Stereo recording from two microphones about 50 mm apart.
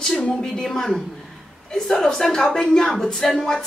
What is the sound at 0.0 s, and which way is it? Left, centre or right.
A woman's voice, centre.